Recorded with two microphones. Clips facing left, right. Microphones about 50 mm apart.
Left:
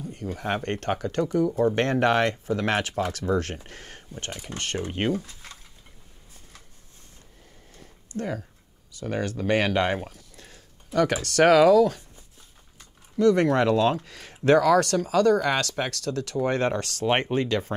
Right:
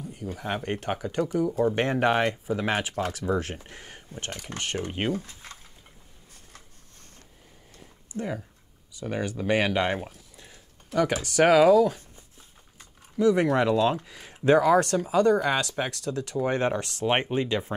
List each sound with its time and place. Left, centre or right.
0.0 s a sound: centre
0.6 s speech: centre
4.5 s speech: right
4.9 s speech: centre
5.2 s speech: right
8.1 s speech: centre
10.1 s a sound: centre
11.2 s speech: centre
13.2 s speech: centre